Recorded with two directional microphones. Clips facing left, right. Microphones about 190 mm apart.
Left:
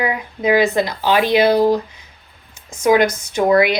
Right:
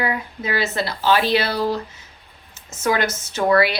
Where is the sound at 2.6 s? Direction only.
15° left (ahead or behind).